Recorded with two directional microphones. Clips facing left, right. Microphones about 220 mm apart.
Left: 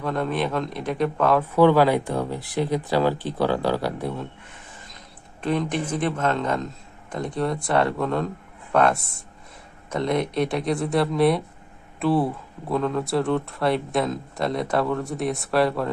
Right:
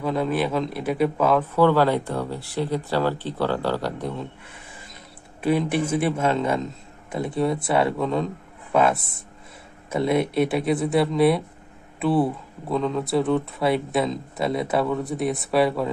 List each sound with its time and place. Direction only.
0.0 s speech: 5° right (ahead or behind)
1.4 s speech: 15° left (ahead or behind)
5.4 s speech: 10° right (ahead or behind)